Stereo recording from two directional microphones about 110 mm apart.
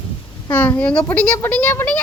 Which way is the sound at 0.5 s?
15° left (ahead or behind).